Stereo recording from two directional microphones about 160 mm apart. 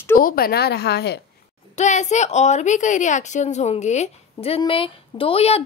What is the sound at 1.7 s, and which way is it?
A woman's voice, 45° left (ahead or behind).